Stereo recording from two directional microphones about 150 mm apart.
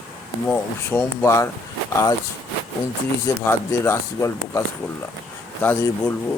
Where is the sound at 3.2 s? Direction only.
15° left (ahead or behind).